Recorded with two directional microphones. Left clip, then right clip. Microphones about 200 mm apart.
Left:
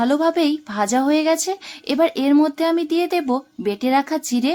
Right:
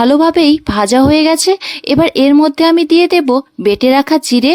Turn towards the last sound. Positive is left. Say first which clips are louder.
# right 10 dB
turn(degrees=-40)  # may be behind; listen again after turning